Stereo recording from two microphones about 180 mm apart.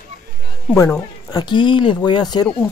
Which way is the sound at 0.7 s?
15° left (ahead or behind).